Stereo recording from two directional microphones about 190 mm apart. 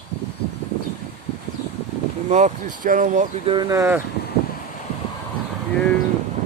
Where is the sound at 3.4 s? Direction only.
25° right (ahead or behind).